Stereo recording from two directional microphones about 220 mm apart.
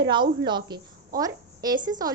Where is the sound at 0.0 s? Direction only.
20° right (ahead or behind).